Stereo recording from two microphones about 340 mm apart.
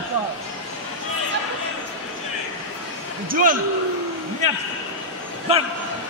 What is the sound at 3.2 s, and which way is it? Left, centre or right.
Speech, right.